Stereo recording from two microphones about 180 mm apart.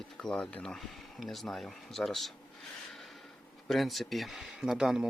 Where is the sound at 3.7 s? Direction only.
Centre (ahead or behind).